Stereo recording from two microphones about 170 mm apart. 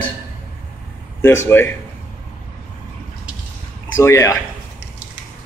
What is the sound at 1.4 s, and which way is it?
Speech, 15° left (ahead or behind).